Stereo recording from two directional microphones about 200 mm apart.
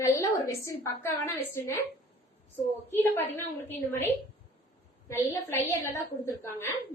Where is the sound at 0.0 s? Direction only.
15° left (ahead or behind).